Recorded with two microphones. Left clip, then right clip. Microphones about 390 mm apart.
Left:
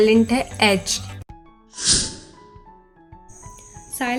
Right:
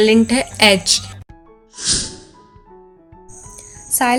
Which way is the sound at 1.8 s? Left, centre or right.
Centre.